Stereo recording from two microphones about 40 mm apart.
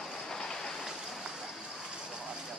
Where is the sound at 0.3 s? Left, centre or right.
Centre.